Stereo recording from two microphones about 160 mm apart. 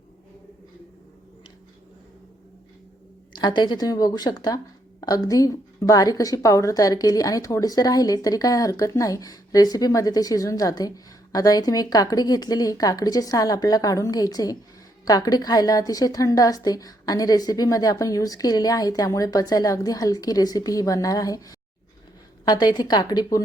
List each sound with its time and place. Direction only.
3.3 s speech: 25° left (ahead or behind)